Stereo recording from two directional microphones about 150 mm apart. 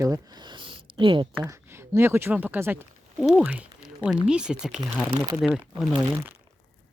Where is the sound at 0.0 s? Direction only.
25° right (ahead or behind).